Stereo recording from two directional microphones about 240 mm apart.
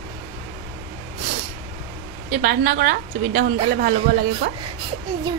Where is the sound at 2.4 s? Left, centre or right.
Right.